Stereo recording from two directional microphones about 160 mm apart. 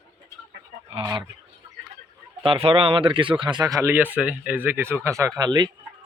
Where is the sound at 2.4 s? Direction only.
35° right (ahead or behind).